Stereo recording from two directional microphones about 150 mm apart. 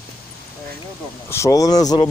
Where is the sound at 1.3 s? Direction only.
20° left (ahead or behind).